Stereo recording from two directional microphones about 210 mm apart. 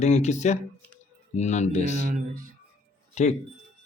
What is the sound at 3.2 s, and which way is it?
Speech, 35° left (ahead or behind).